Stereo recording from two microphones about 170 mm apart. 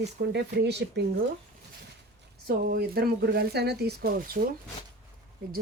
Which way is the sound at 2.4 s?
60° right (ahead or behind).